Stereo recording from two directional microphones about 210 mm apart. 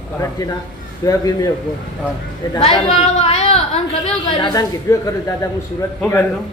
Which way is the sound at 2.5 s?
25° left (ahead or behind).